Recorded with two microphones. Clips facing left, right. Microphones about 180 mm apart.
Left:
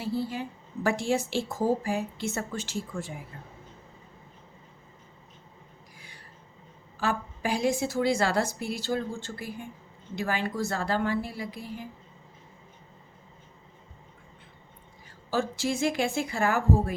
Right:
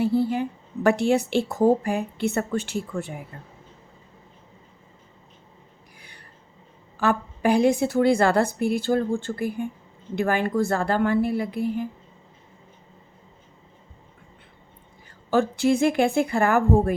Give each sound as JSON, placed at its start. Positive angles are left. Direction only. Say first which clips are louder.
{"t": 0.0, "sound": "a woman's voice", "louder": "right 9 dB", "side_deg": -55}
{"t": 7.0, "sound": "a woman's voice", "louder": "right 7 dB", "side_deg": -60}
{"t": 15.3, "sound": "a woman's voice", "louder": "right 8 dB", "side_deg": -60}